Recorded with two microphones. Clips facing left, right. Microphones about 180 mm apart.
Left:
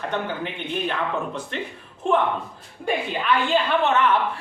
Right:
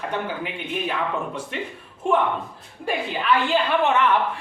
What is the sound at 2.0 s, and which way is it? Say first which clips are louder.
Speech: even; 10° right (ahead or behind).